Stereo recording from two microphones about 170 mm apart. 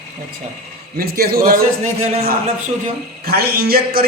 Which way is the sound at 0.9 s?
65° right (ahead or behind).